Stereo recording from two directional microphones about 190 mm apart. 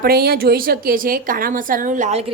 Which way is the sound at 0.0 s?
55° right (ahead or behind).